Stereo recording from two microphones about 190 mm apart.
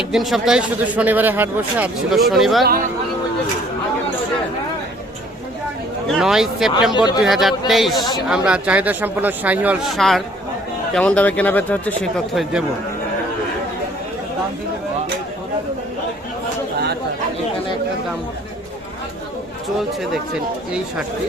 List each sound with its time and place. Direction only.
0.1 s a man's voice: centre (ahead or behind)
6.1 s a man's voice: centre (ahead or behind)
6.9 s speech: 20° left (ahead or behind)
7.3 s a man's voice: centre (ahead or behind)